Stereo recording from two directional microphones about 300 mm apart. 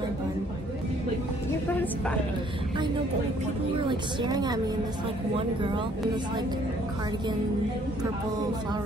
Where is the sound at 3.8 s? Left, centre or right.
Centre.